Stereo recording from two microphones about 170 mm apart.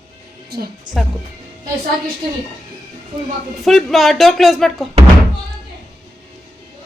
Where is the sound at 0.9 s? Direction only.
25° right (ahead or behind).